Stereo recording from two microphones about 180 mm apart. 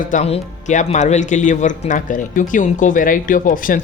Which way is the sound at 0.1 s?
45° left (ahead or behind).